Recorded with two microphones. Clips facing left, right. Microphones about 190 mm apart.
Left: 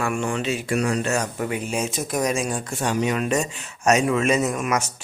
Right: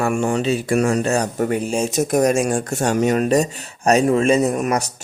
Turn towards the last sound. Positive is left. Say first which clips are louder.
# right 4 dB
turn(degrees=-40)  # may be behind; listen again after turning